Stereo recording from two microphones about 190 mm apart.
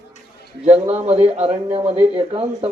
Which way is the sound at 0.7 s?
35° right (ahead or behind).